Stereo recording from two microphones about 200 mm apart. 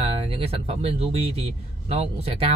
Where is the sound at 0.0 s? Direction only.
30° right (ahead or behind).